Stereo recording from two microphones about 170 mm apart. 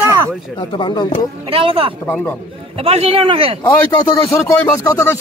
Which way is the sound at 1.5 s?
30° right (ahead or behind).